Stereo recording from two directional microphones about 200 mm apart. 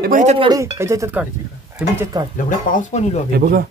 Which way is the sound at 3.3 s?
45° right (ahead or behind).